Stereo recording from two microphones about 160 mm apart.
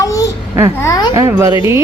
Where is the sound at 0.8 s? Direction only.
25° left (ahead or behind).